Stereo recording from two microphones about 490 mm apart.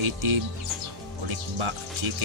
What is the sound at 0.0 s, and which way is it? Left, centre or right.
Speech, right.